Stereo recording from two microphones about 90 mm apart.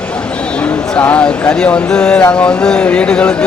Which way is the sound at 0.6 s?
15° left (ahead or behind).